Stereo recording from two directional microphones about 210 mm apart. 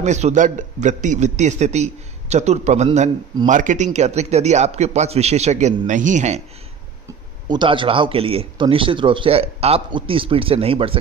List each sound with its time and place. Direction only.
0.0 s a man's voice: 35° right (ahead or behind)
7.4 s speech: 20° right (ahead or behind)